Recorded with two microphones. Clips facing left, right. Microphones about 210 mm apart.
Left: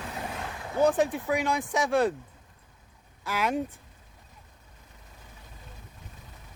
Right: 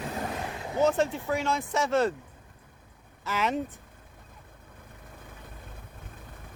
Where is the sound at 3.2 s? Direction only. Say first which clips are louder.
Even; 10° left (ahead or behind).